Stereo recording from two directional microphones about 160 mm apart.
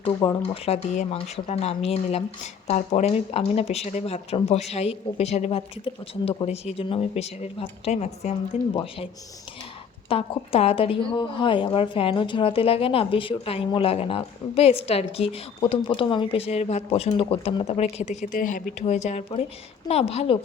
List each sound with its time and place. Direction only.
0.4 s a woman's voice: 35° left (ahead or behind)
8.7 s a woman's voice: 35° left (ahead or behind)
10.1 s a woman's voice: 35° left (ahead or behind)